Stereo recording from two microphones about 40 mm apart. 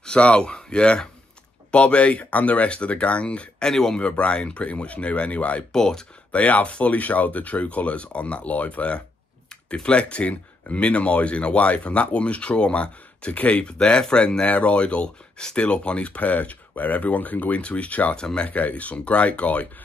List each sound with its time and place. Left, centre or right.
0.0 s speech: left
3.6 s speech: centre
4.2 s speech: left
5.7 s speech: centre
6.3 s speech: left
13.7 s speech: left
18.1 s speech: left
18.5 s speech: left